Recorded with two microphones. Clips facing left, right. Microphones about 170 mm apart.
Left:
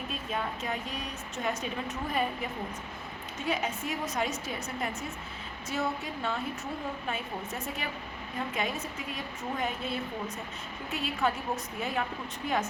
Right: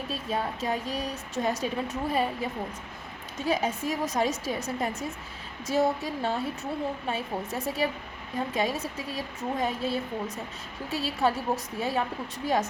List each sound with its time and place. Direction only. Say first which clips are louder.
0.1 s speech: right 4 dB; 35° right (ahead or behind)
7.8 s speech: right 8 dB; 35° right (ahead or behind)